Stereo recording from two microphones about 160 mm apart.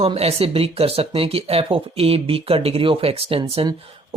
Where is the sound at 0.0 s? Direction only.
40° right (ahead or behind).